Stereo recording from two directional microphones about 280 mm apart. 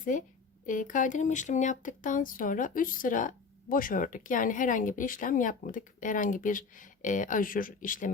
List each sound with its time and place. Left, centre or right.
0.0 s speech: left